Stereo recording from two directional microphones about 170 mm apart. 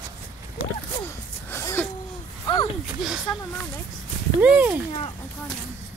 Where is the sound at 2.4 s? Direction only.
25° left (ahead or behind).